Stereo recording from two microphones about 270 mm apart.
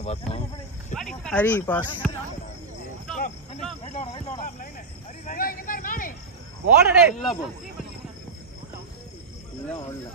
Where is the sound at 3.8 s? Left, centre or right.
Left.